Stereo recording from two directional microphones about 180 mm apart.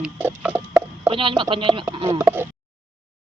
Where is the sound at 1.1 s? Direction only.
30° right (ahead or behind).